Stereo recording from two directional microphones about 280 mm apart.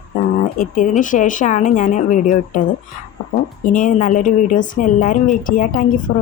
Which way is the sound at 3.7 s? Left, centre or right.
Left.